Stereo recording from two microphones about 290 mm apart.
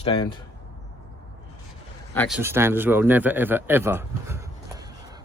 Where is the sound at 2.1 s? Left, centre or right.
Centre.